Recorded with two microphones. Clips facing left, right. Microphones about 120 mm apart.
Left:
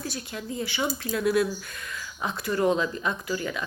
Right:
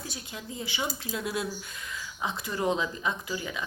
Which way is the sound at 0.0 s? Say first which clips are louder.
Left 6 dB; 15° right (ahead or behind).